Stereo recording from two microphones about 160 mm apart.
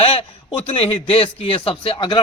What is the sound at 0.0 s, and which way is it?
A man's voice, 40° left (ahead or behind).